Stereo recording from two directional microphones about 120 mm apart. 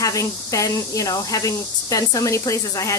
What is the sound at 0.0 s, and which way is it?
Speech, 30° left (ahead or behind).